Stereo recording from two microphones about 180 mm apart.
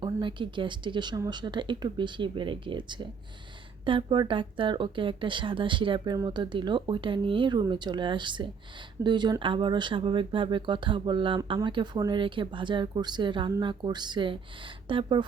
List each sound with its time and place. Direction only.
0.0 s speech: 25° right (ahead or behind)